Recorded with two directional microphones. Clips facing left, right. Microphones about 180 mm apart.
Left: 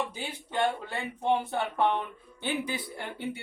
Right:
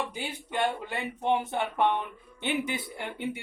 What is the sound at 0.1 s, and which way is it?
Speech, 10° right (ahead or behind).